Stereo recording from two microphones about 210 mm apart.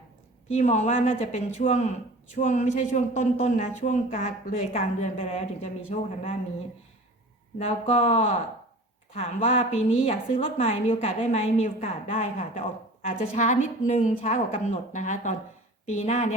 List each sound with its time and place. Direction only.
0.4 s a man's voice: 30° left (ahead or behind)
7.6 s a woman's voice: 30° left (ahead or behind)